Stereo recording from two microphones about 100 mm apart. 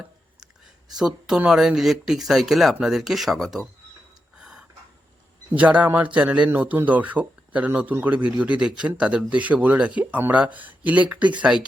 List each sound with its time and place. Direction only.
0.9 s speech: 5° right (ahead or behind)
4.4 s a sound: 10° right (ahead or behind)
5.5 s speech: 15° right (ahead or behind)